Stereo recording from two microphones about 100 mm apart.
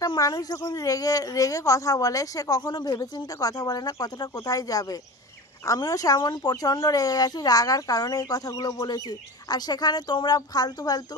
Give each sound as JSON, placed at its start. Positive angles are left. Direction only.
{"t": 0.0, "sound": "a woman's voice", "side_deg": 40}